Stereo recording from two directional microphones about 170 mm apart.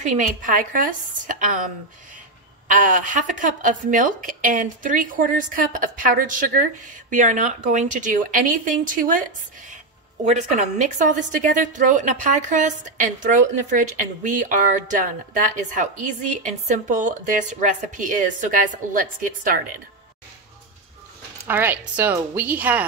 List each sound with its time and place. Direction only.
0.1 s a woman's voice: 50° right (ahead or behind)
2.7 s a woman's voice: 50° right (ahead or behind)
10.2 s a woman's voice: 45° right (ahead or behind)
21.5 s a woman's voice: 10° right (ahead or behind)